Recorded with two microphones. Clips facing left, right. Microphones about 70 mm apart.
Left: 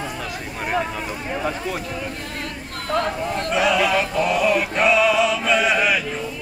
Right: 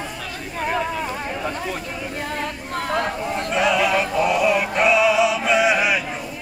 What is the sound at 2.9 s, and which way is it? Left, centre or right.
Speech, centre.